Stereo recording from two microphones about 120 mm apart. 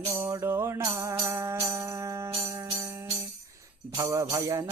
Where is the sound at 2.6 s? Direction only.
30° right (ahead or behind).